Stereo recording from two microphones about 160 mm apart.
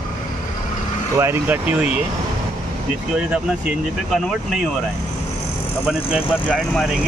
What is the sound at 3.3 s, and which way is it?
Speech, 5° right (ahead or behind).